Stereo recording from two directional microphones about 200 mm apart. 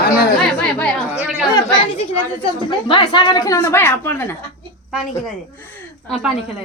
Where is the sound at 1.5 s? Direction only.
25° left (ahead or behind).